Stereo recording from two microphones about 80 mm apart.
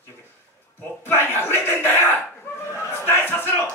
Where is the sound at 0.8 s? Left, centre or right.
Left.